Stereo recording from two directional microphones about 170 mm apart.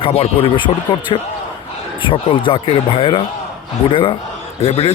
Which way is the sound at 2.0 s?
30° left (ahead or behind).